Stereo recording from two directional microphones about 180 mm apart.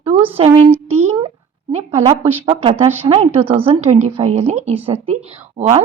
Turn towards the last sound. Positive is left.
turn(degrees=-35)  # may be behind; listen again after turning